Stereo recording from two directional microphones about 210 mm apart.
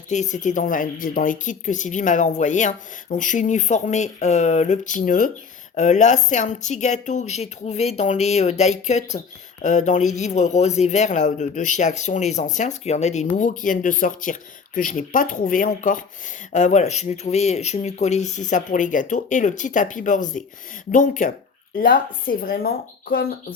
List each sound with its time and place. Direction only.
0.1 s speech: 35° left (ahead or behind)